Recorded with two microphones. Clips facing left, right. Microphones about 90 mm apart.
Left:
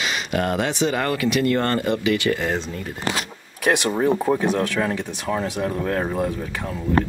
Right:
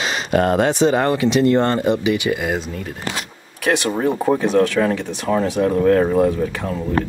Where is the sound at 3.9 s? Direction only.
Centre (ahead or behind).